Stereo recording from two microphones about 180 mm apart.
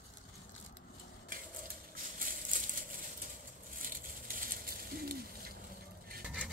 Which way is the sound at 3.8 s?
50° right (ahead or behind).